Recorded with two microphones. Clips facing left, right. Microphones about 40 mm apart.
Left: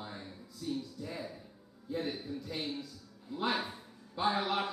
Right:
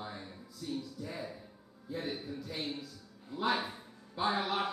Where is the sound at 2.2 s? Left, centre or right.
Centre.